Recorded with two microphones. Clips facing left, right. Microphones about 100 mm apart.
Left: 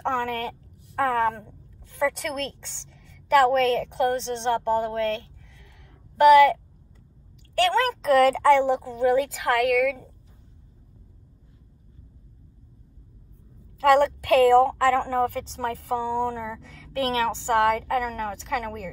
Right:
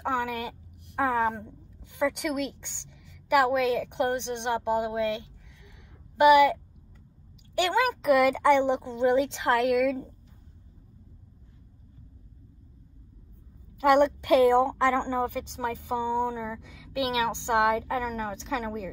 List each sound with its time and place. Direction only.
0.0 s a woman's voice: 10° right (ahead or behind); by 10.0 s 25° right (ahead or behind)
13.7 s a woman's voice: 20° right (ahead or behind)